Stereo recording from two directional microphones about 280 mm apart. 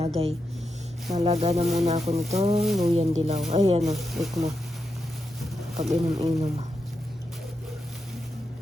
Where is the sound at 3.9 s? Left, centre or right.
Centre.